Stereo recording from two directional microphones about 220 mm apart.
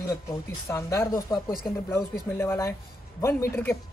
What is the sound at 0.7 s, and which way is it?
A man's voice, 15° left (ahead or behind).